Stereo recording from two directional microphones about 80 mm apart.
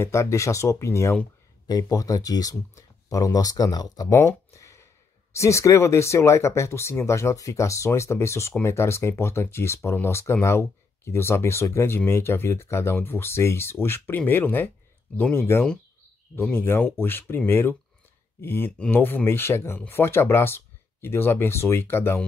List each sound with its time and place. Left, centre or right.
0.0 s speech: left
1.7 s speech: left
4.2 s a sound: left
5.3 s speech: left